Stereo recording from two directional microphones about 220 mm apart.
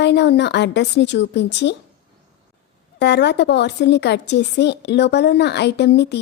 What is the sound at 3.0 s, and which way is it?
A woman's voice, 50° left (ahead or behind).